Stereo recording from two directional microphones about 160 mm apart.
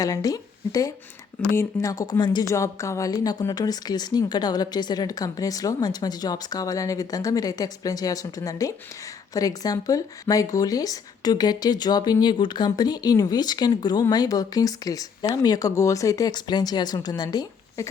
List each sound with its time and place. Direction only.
0.0 s a woman's voice: 20° left (ahead or behind)